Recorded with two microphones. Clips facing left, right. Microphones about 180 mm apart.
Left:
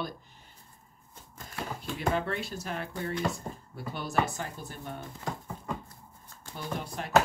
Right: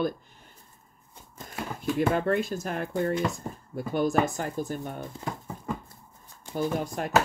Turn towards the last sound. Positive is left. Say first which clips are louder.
# right 8 dB
turn(degrees=-45)  # may be behind; listen again after turning